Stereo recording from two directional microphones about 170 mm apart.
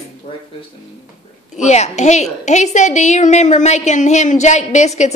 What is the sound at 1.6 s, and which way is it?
A woman's voice, 40° left (ahead or behind).